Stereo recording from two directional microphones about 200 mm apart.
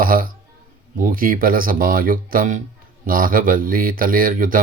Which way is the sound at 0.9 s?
45° right (ahead or behind).